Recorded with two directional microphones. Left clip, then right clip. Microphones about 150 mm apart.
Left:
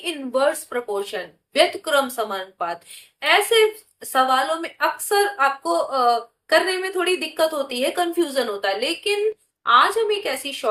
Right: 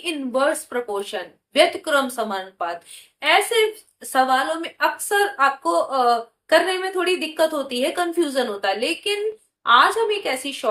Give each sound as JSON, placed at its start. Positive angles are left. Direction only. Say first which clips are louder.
{"t": 0.0, "sound": "speech", "louder": "even", "side_deg": -5}